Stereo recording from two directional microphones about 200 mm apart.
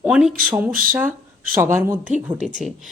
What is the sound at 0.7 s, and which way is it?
Speech, 45° right (ahead or behind).